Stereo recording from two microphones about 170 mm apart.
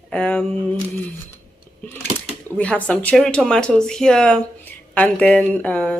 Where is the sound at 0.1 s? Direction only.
10° left (ahead or behind).